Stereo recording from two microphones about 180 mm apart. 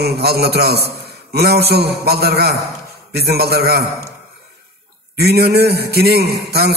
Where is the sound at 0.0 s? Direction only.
60° right (ahead or behind).